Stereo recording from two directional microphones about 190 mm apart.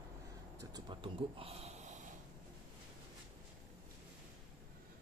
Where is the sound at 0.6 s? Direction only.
20° right (ahead or behind).